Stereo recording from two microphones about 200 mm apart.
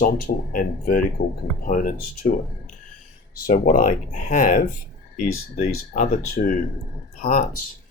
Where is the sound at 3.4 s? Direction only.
40° left (ahead or behind).